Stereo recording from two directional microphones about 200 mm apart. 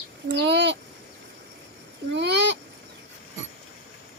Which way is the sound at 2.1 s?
60° right (ahead or behind).